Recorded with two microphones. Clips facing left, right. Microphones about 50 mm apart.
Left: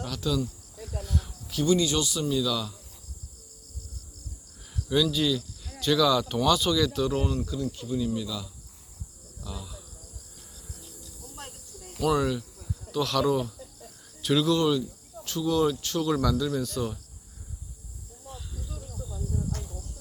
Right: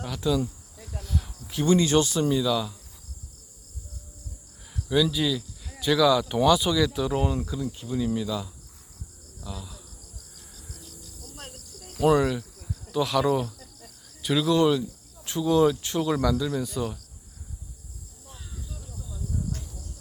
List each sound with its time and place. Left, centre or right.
0.0 s speech: centre
0.8 s cricket: centre
1.5 s speech: right
2.3 s speech: centre
4.7 s a sound: centre
5.1 s speech: centre; by 8.4 s right
9.4 s speech: centre
10.5 s a sound: right
10.8 s cricket: left
11.9 s speech: right; by 14.5 s centre
14.5 s speech: centre